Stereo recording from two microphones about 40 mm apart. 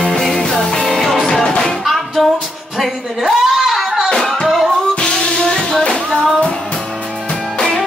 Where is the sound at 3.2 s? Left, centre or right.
Centre.